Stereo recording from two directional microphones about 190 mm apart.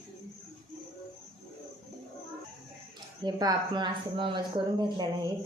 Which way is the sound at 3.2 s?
20° right (ahead or behind).